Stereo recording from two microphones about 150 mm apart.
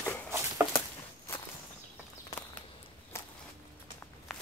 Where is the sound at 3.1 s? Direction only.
20° left (ahead or behind).